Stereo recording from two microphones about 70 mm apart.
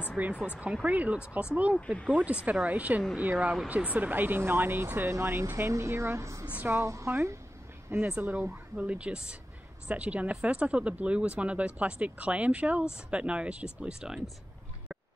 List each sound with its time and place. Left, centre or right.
0.2 s a woman's voice: right
6.5 s speech: right
6.8 s a woman's voice: right
8.2 s speech: right
8.7 s speech: centre